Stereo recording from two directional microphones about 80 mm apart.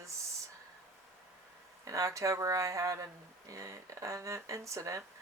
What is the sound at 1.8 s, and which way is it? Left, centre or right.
Speech, right.